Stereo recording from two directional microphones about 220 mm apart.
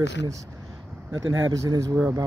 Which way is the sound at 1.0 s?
60° right (ahead or behind).